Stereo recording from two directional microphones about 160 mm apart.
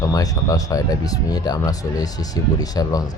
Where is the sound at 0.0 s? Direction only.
20° left (ahead or behind).